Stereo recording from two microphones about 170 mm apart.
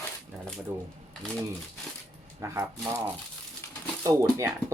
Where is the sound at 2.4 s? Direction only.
15° right (ahead or behind).